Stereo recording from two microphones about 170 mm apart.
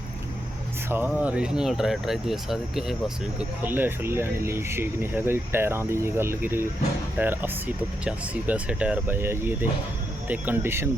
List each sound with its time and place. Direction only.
0.9 s speech: 10° right (ahead or behind)